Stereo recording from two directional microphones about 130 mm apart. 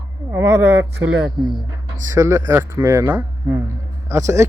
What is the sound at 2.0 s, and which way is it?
Speech, 25° right (ahead or behind).